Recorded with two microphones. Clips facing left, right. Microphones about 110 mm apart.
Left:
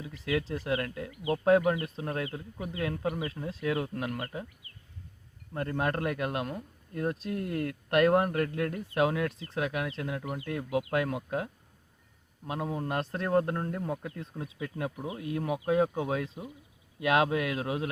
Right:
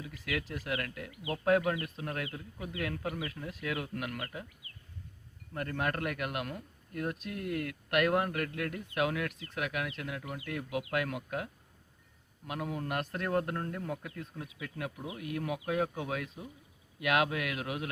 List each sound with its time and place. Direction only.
0.0 s speech: 25° left (ahead or behind)
5.5 s speech: 25° left (ahead or behind)